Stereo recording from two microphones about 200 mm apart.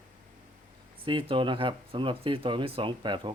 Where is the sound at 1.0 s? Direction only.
25° right (ahead or behind).